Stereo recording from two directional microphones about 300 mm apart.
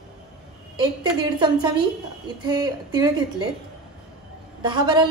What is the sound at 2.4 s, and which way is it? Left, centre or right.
A woman's voice, centre.